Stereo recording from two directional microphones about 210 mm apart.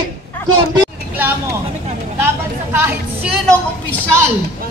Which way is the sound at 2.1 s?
10° right (ahead or behind).